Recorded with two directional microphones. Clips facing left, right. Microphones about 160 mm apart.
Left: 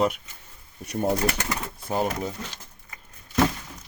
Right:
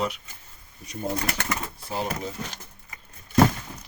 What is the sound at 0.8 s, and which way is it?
Speech, 65° left (ahead or behind).